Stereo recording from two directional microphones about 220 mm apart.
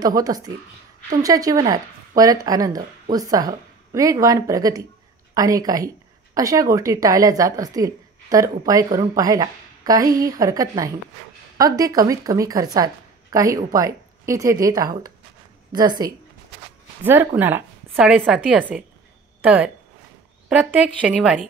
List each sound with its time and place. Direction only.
0.0 s a woman's voice: 15° right (ahead or behind)